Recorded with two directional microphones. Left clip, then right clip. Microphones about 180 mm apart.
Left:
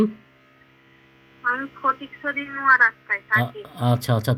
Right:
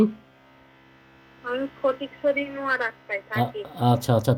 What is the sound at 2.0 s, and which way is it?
Speech, 35° right (ahead or behind).